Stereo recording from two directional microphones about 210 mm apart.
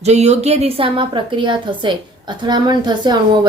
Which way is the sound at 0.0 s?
30° right (ahead or behind).